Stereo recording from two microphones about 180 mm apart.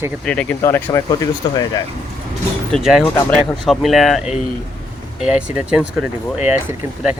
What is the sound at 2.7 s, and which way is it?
Speech, 5° left (ahead or behind).